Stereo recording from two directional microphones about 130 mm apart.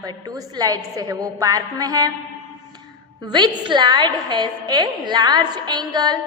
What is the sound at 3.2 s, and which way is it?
A woman's voice, 35° right (ahead or behind).